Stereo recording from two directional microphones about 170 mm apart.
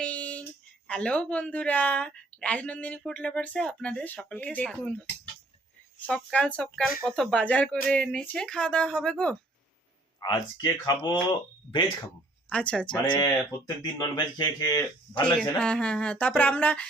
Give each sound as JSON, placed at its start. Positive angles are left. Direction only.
{"t": 0.0, "sound": "a sound", "side_deg": 5}
{"t": 0.9, "sound": "speech", "side_deg": 5}
{"t": 6.1, "sound": "speech", "side_deg": 5}
{"t": 10.2, "sound": "speech", "side_deg": 25}
{"t": 12.5, "sound": "speech", "side_deg": 5}
{"t": 13.1, "sound": "speech", "side_deg": 20}
{"t": 15.2, "sound": "speech", "side_deg": 5}